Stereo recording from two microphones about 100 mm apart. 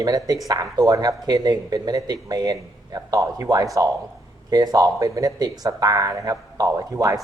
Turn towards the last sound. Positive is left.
turn(degrees=-35)  # may be behind; listen again after turning